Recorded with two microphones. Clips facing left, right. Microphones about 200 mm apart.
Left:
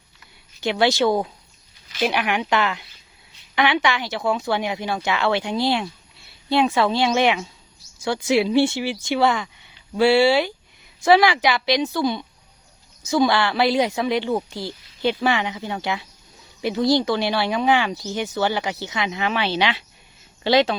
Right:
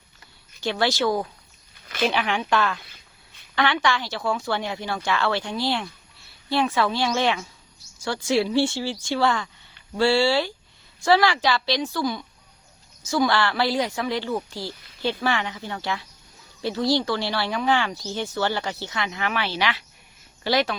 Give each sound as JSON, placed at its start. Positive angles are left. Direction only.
{"t": 0.6, "sound": "speech", "side_deg": 20}